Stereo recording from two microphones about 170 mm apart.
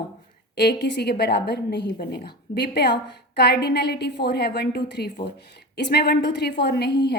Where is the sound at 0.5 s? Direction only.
75° left (ahead or behind).